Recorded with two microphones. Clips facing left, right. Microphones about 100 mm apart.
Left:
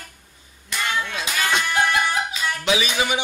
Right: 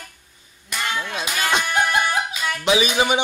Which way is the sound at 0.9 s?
20° right (ahead or behind).